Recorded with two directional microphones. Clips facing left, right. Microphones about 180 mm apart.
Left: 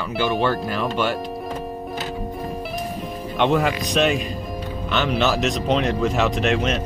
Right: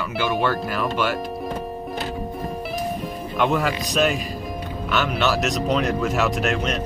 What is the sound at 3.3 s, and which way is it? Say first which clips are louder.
Speech: left 2 dB; centre (ahead or behind).